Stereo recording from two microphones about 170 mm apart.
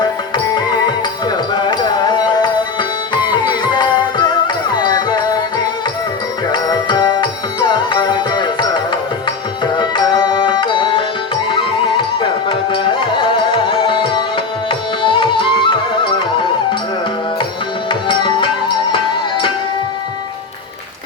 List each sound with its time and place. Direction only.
1.3 s music: 25° left (ahead or behind)
9.7 s tabla: 25° left (ahead or behind)
11.5 s music: 30° left (ahead or behind)
14.7 s carnatic music: 30° left (ahead or behind)
17.8 s music: 30° left (ahead or behind)